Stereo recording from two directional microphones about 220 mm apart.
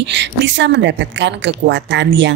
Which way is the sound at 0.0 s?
55° right (ahead or behind).